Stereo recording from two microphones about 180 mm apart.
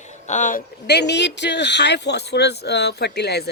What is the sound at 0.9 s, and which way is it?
Speech, 70° left (ahead or behind).